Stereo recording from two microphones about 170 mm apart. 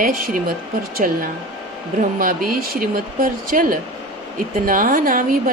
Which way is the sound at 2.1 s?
55° right (ahead or behind).